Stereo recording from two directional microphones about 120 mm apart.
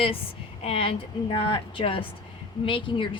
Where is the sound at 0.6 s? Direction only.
55° left (ahead or behind).